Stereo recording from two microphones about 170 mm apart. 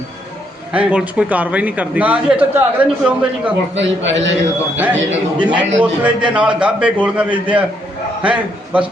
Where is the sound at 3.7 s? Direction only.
90° right.